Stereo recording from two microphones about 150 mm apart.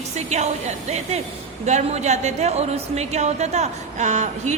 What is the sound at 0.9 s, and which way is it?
Speech, 45° right (ahead or behind).